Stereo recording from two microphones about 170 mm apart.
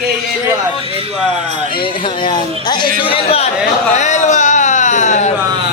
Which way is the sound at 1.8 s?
30° left (ahead or behind).